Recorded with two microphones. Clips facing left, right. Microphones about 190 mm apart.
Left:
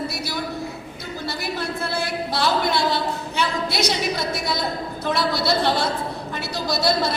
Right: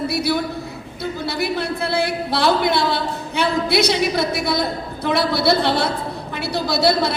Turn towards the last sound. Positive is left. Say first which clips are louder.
# right 4 dB
turn(degrees=-60)  # may be behind; listen again after turning